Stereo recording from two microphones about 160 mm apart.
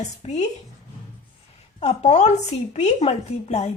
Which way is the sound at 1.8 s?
45° left (ahead or behind).